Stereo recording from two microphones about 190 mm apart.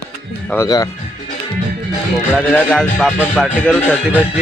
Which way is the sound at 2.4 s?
5° left (ahead or behind).